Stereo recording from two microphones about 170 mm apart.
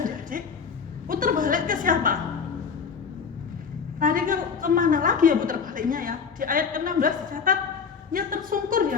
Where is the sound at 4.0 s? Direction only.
55° right (ahead or behind).